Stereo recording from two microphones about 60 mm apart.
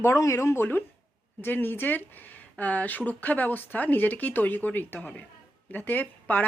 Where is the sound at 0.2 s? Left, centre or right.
Left.